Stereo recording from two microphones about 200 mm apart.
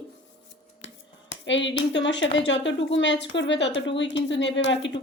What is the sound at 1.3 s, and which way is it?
A woman's voice, 65° left (ahead or behind).